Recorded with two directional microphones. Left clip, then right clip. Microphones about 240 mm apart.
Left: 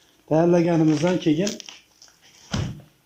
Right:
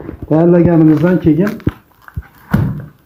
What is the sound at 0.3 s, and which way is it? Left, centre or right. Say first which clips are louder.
A man's voice: right 8 dB; left.